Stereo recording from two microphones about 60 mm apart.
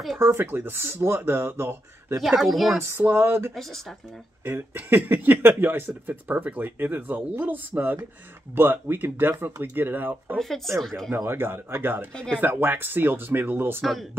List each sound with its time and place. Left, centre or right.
0.2 s speech: right
2.2 s speech: centre
2.8 s speech: right
10.3 s speech: centre
11.1 s speech: right